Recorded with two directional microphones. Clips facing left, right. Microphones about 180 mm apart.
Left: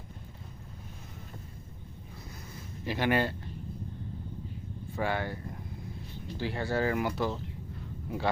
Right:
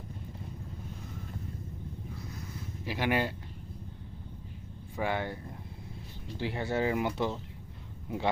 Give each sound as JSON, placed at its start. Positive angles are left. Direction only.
{"t": 2.8, "sound": "speech", "side_deg": -10}
{"t": 4.9, "sound": "speech", "side_deg": -20}
{"t": 6.4, "sound": "speech", "side_deg": -20}